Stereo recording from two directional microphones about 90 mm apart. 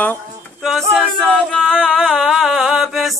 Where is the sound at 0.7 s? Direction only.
Centre (ahead or behind).